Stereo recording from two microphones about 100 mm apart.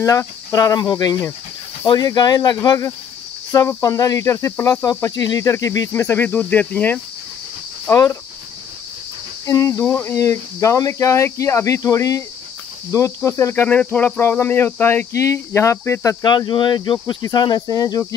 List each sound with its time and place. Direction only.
0.0 s speech: 35° left (ahead or behind)
5.9 s cricket: 20° left (ahead or behind)
7.9 s cricket: 30° left (ahead or behind)
9.5 s speech: 35° left (ahead or behind)
12.9 s cricket: 30° left (ahead or behind)
13.7 s cricket: 15° left (ahead or behind); by 16.3 s 30° left (ahead or behind)
16.3 s speech: 50° left (ahead or behind)